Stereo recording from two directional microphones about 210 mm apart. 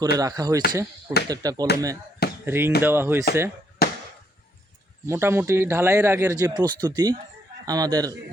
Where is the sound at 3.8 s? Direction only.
50° left (ahead or behind).